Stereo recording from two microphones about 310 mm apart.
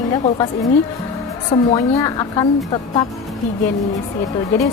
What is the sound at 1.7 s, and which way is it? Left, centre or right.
A woman's voice, centre.